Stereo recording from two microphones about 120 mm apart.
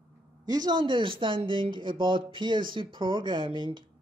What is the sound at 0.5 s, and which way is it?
Speech, 35° right (ahead or behind).